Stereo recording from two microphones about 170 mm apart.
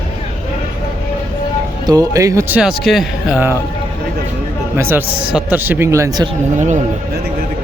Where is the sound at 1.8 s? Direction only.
20° right (ahead or behind).